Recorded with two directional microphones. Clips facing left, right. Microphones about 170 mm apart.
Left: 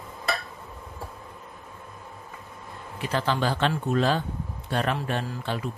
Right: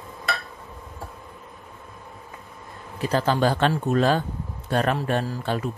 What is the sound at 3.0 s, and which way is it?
Speech, 40° right (ahead or behind).